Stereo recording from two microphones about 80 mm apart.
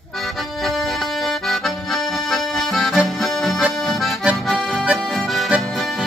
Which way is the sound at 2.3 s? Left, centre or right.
Centre.